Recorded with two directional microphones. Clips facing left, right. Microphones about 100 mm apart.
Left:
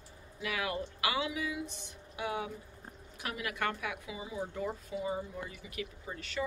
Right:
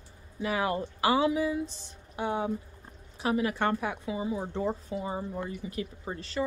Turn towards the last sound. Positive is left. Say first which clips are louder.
# right 5 dB
turn(degrees=-35)  # may be behind; listen again after turning